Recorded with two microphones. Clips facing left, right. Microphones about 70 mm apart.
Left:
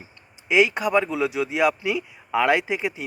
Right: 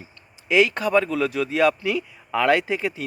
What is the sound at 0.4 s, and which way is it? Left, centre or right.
Speech, centre.